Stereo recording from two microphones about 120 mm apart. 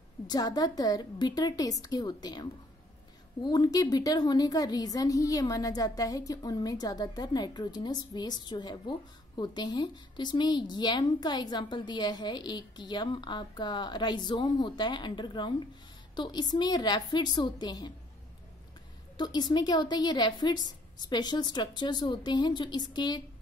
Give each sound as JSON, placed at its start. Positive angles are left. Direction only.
{"t": 0.3, "sound": "a woman's voice", "side_deg": 35}
{"t": 19.1, "sound": "a woman's voice", "side_deg": 35}